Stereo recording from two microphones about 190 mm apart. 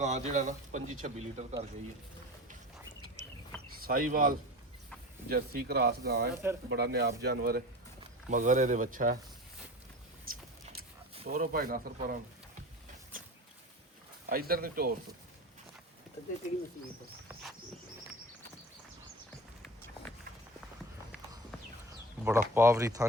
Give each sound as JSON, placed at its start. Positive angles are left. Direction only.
{"t": 0.0, "sound": "speech", "side_deg": -40}
{"t": 3.7, "sound": "speech", "side_deg": -50}
{"t": 8.3, "sound": "speech", "side_deg": -40}
{"t": 10.3, "sound": "a sound", "side_deg": -50}
{"t": 11.3, "sound": "speech", "side_deg": -50}
{"t": 14.3, "sound": "speech", "side_deg": -50}
{"t": 21.8, "sound": "speech", "side_deg": -15}